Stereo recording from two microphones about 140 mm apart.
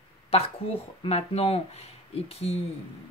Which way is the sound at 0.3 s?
45° left (ahead or behind).